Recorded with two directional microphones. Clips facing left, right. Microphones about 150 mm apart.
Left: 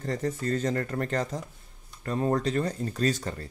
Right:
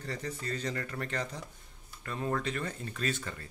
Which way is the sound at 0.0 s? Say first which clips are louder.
Left 8 dB; 45° left (ahead or behind).